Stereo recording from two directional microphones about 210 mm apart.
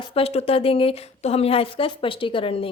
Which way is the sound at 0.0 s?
25° left (ahead or behind).